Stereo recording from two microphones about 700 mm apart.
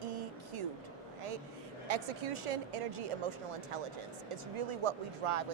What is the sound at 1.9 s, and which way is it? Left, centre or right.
Speech, right.